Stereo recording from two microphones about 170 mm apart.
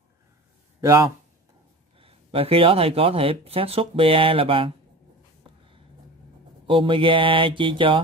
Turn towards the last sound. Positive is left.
turn(degrees=-30)  # may be behind; listen again after turning